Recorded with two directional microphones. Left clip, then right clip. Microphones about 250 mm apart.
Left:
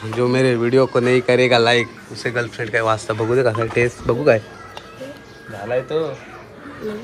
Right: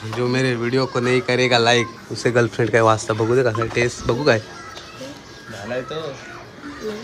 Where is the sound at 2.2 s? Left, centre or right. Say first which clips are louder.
Right 4 dB; right; by 4.4 s centre.